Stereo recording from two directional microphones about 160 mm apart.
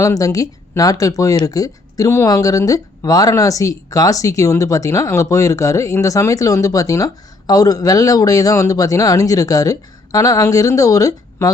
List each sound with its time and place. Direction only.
0.0 s speech: 20° left (ahead or behind)